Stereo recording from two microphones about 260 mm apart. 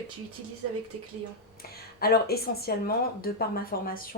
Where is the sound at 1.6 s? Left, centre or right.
Left.